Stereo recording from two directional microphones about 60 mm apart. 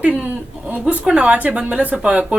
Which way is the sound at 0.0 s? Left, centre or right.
Right.